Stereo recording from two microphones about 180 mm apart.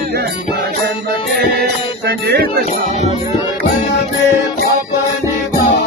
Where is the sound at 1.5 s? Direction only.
60° right (ahead or behind).